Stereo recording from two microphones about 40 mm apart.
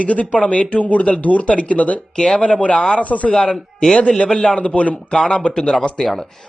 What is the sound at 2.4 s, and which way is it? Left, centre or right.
Speech, left.